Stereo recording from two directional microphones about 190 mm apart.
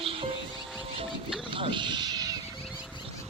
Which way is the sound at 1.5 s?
25° right (ahead or behind).